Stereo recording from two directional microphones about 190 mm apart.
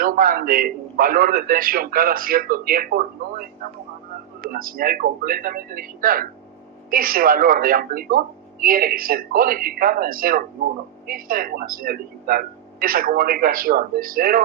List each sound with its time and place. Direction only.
0.0 s a man's voice: 50° right (ahead or behind)
4.5 s a man's voice: 50° right (ahead or behind)